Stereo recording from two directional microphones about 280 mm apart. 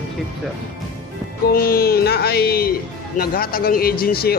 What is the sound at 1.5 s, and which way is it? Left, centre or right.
A man's voice, left.